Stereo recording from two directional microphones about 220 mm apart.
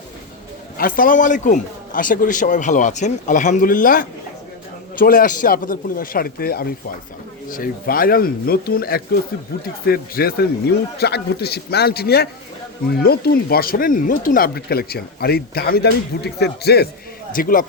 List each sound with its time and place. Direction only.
0.8 s a man's voice: 40° left (ahead or behind)